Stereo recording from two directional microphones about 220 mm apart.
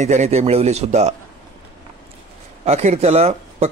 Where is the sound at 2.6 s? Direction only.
30° right (ahead or behind).